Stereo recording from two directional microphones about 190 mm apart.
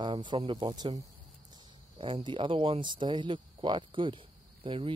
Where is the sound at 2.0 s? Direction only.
25° right (ahead or behind).